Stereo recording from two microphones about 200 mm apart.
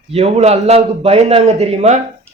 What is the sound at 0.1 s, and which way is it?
Speech, 30° right (ahead or behind).